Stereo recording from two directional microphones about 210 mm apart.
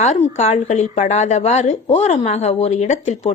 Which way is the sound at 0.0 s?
35° left (ahead or behind).